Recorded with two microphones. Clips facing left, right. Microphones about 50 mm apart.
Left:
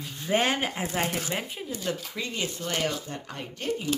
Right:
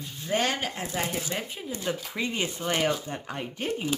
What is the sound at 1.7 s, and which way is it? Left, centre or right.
Speech, centre.